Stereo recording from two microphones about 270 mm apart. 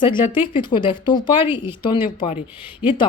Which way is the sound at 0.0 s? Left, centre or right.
Centre.